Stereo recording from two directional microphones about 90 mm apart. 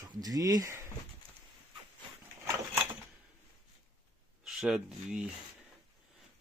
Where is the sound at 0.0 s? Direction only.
45° right (ahead or behind).